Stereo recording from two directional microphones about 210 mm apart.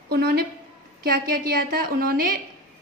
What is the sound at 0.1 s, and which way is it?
A woman's voice, 45° right (ahead or behind).